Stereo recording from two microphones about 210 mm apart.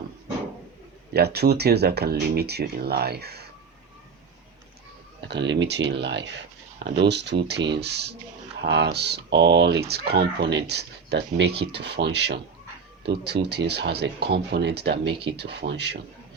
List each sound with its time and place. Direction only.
1.1 s speech: 50° right (ahead or behind)
5.3 s speech: 55° right (ahead or behind)
15.0 s speech: 25° right (ahead or behind)
15.3 s speech: 50° right (ahead or behind)